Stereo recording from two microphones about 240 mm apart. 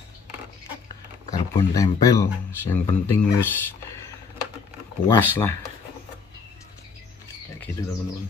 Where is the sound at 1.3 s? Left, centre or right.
Centre.